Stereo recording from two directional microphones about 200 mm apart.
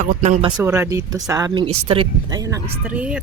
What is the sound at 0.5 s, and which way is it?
Speech, 10° right (ahead or behind).